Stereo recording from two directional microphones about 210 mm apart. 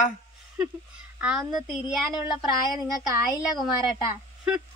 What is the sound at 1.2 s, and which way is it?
Speech, 5° right (ahead or behind).